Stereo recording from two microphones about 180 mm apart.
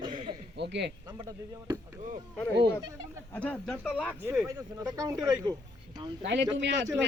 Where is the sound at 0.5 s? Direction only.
75° right (ahead or behind).